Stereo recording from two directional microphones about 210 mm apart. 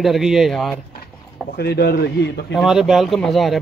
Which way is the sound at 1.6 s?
50° left (ahead or behind).